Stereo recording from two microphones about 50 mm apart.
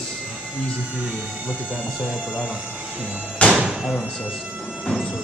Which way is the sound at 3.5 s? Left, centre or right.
Centre.